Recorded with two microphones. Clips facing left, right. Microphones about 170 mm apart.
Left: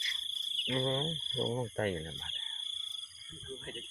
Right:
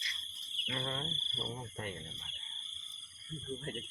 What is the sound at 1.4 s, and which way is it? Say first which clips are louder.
Speech: left 10 dB; 40° left (ahead or behind).